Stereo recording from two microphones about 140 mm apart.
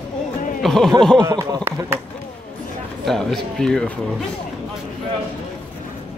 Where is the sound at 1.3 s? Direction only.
25° right (ahead or behind).